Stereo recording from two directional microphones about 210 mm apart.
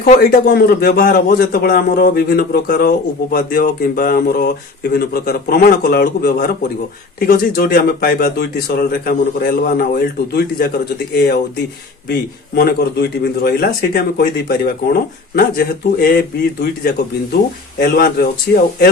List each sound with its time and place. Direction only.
0.0 s speech: 40° left (ahead or behind)